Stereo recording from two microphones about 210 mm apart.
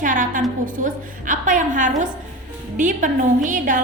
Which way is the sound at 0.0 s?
40° right (ahead or behind).